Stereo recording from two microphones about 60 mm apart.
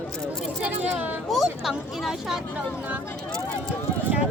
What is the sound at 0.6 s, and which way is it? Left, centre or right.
Speech, right.